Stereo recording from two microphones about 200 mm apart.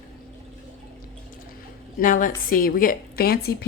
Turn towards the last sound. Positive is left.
turn(degrees=50)  # may be behind; listen again after turning